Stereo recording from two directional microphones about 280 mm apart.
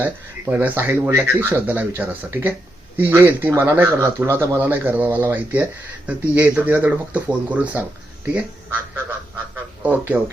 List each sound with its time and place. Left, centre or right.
0.0 s speech: centre
9.8 s speech: centre